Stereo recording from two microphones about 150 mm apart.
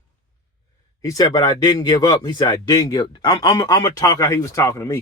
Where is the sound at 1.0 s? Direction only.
25° left (ahead or behind).